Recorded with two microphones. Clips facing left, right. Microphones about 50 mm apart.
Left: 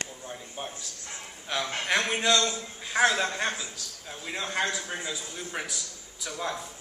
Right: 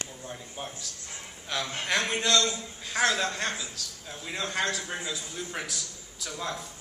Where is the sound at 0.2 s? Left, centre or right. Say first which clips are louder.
Left 1 dB; centre.